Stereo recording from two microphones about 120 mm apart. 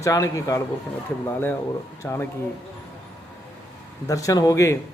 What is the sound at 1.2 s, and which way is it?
Speech, 20° left (ahead or behind).